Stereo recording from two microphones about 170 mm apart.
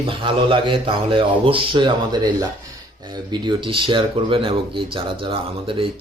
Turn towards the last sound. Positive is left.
turn(degrees=-30)  # may be behind; listen again after turning